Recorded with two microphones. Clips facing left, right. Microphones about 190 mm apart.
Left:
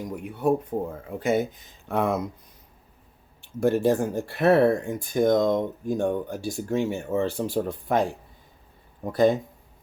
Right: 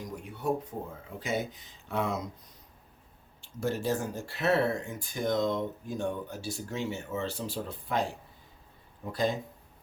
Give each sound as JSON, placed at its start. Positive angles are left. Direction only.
{"t": 0.2, "sound": "speech", "side_deg": 55}
{"t": 3.4, "sound": "speech", "side_deg": 55}
{"t": 9.1, "sound": "speech", "side_deg": 55}